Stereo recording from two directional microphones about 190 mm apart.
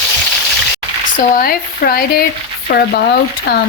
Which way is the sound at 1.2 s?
45° left (ahead or behind).